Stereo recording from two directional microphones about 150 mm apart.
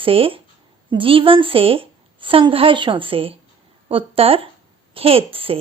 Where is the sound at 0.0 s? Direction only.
40° right (ahead or behind).